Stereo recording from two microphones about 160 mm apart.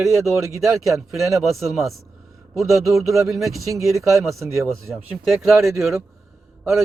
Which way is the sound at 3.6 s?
20° right (ahead or behind).